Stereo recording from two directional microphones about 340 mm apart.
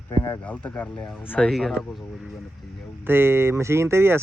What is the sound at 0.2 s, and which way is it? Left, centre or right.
A man's voice, centre.